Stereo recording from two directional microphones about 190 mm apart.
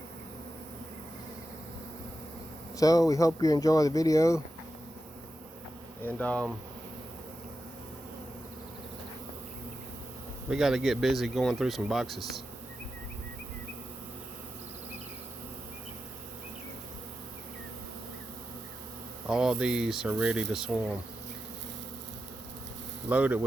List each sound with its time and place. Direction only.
2.7 s speech: 20° left (ahead or behind)
6.0 s speech: 10° left (ahead or behind)
10.5 s speech: centre (ahead or behind)
19.3 s speech: 5° right (ahead or behind)
23.0 s speech: 10° right (ahead or behind)